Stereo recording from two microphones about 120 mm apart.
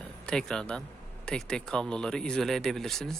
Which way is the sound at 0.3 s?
5° left (ahead or behind).